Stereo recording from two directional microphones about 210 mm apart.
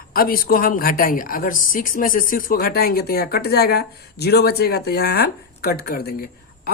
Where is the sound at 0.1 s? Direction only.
45° left (ahead or behind).